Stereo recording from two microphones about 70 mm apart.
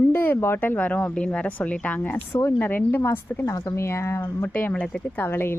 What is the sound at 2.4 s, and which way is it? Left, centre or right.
Speech, left.